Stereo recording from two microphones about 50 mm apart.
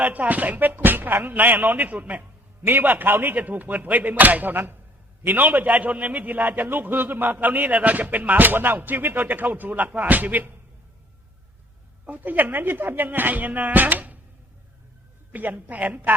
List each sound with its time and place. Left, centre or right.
0.0 s a man's voice: right
12.0 s a man's voice: right
15.3 s a man's voice: right